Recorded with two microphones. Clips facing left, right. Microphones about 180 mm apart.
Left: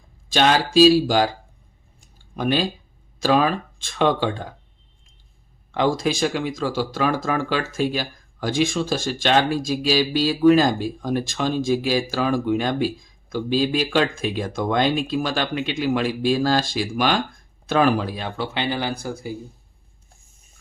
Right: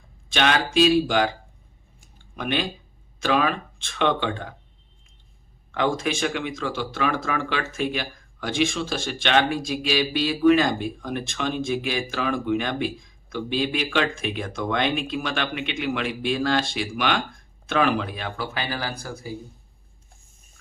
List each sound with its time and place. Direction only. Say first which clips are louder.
0.3 s speech: left 4 dB; 30° left (ahead or behind)
2.3 s speech: left 5 dB; 35° left (ahead or behind)
5.7 s speech: left 3 dB; 30° left (ahead or behind)